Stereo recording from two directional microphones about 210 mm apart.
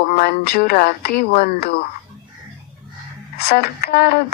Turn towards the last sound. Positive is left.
turn(degrees=50)  # may be behind; listen again after turning